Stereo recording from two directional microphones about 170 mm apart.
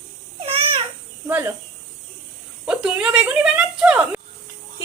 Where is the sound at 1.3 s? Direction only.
10° right (ahead or behind).